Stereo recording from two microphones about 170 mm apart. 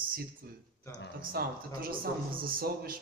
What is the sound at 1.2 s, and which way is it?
Speech, 60° right (ahead or behind).